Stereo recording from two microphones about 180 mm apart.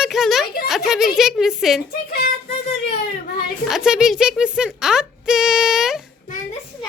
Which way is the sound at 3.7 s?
5° right (ahead or behind).